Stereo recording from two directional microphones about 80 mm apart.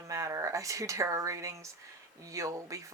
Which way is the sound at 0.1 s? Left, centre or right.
Right.